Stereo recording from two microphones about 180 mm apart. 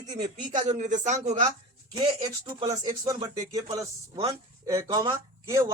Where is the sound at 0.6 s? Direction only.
40° right (ahead or behind).